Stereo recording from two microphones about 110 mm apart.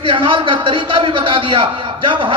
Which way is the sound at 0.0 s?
50° right (ahead or behind).